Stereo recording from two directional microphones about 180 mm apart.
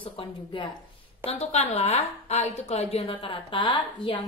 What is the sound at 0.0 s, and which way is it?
A woman's voice, 30° left (ahead or behind).